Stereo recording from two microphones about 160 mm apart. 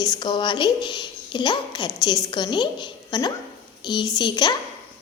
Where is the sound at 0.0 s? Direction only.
25° left (ahead or behind).